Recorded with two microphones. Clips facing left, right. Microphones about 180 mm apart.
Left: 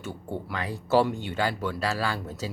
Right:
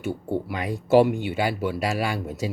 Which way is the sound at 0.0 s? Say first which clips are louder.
Right 7 dB; 10° right (ahead or behind).